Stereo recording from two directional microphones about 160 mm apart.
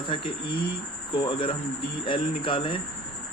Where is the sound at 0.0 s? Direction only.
30° left (ahead or behind).